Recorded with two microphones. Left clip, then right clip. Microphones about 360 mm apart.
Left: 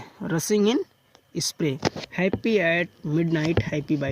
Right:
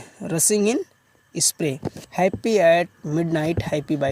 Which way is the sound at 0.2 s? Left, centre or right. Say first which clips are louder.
Right 2 dB; centre.